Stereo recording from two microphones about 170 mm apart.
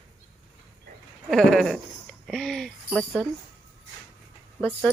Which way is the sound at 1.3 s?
5° left (ahead or behind).